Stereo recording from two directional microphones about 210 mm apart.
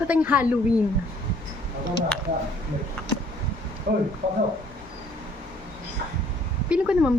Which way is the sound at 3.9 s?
45° right (ahead or behind).